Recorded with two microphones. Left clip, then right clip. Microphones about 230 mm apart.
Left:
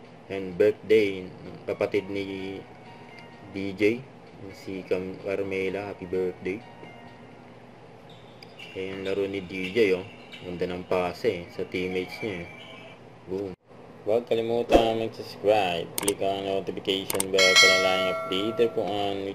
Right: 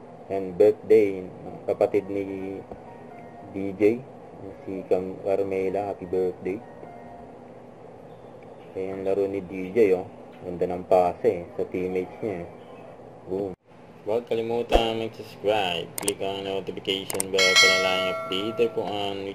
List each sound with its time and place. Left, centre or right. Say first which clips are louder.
0.3 s speech: right 4 dB; left
3.5 s speech: right 3 dB; left
8.7 s speech: right 4 dB; left
14.0 s speech: left 1 dB; centre